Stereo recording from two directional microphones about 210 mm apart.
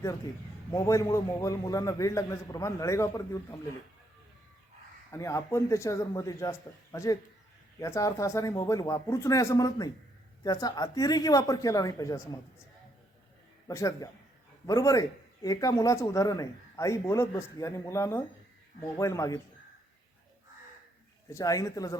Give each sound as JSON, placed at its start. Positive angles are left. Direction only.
{"t": 0.7, "sound": "speech", "side_deg": 15}
{"t": 5.1, "sound": "speech", "side_deg": 15}
{"t": 13.7, "sound": "speech", "side_deg": 15}
{"t": 21.2, "sound": "speech", "side_deg": 15}